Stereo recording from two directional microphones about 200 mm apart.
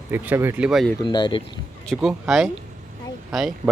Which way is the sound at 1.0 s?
20° left (ahead or behind).